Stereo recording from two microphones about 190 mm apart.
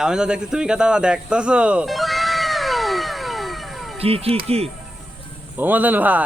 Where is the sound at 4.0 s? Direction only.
30° right (ahead or behind).